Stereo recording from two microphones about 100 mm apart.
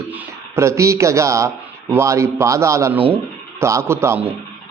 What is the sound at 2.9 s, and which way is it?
Speech, 15° right (ahead or behind).